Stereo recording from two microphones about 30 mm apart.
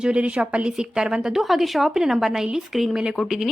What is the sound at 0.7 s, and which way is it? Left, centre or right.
Speech, right.